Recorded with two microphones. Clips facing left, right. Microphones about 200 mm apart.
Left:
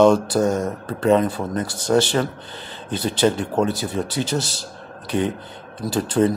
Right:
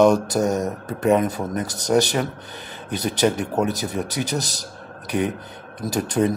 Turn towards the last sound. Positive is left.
turn(degrees=-20)  # may be behind; listen again after turning